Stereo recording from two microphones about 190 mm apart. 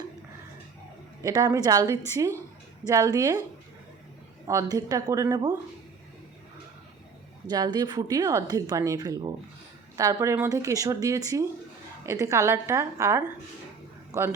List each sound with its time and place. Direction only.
1.2 s speech: 20° right (ahead or behind)
4.4 s speech: 20° right (ahead or behind)
7.5 s speech: 20° right (ahead or behind)